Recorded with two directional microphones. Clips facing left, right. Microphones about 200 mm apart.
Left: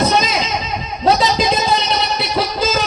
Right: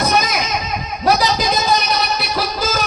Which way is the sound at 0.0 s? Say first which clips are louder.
Left 2 dB; 25° left (ahead or behind).